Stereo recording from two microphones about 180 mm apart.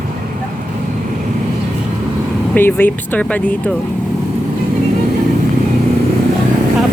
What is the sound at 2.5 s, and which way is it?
Speech, 10° left (ahead or behind).